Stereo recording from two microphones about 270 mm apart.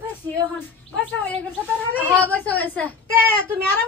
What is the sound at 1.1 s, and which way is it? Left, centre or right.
Speech, centre.